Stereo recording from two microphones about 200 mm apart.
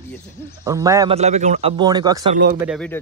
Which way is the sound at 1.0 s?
30° right (ahead or behind).